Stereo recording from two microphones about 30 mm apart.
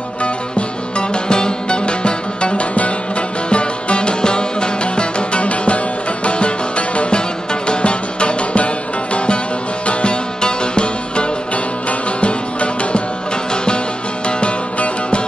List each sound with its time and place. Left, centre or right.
0.2 s music: left
2.7 s music: left
3.4 s music: left
7.0 s music: left
10.4 s music: left